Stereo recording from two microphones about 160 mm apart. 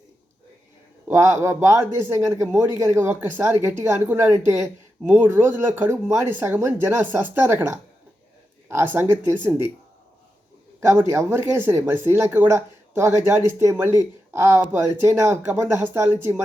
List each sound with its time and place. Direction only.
1.0 s a man's voice: 15° right (ahead or behind)
10.8 s a man's voice: 15° right (ahead or behind)